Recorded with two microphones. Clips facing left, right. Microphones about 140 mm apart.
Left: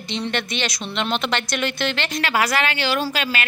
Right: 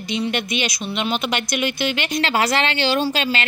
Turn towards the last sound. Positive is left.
turn(degrees=-25)  # may be behind; listen again after turning